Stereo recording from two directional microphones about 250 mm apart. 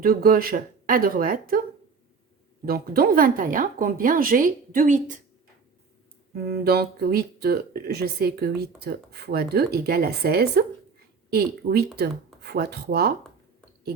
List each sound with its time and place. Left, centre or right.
0.0 s speech: right
2.6 s speech: right
6.3 s speech: right